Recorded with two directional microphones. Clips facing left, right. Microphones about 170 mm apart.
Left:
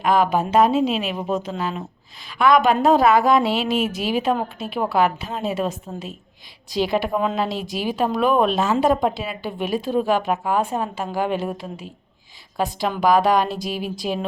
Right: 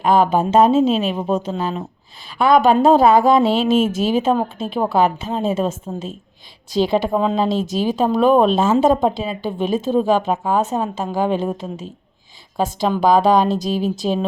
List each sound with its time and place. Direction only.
0.0 s speech: 30° right (ahead or behind)